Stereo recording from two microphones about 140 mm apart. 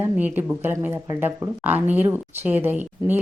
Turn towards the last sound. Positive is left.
turn(degrees=-15)  # may be behind; listen again after turning